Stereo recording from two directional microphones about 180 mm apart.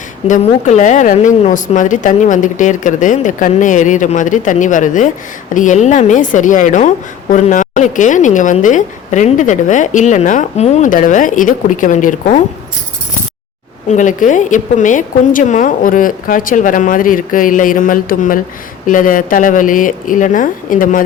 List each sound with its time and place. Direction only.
0.3 s a woman's voice: 40° left (ahead or behind)
13.8 s a woman's voice: 45° left (ahead or behind)